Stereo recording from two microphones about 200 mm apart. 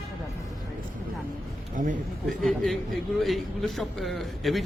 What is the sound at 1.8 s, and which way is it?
Speech, 40° right (ahead or behind).